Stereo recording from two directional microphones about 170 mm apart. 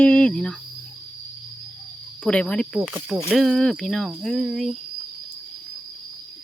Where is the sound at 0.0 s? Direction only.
5° left (ahead or behind).